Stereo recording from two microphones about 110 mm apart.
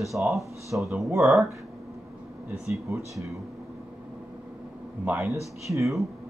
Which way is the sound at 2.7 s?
25° right (ahead or behind).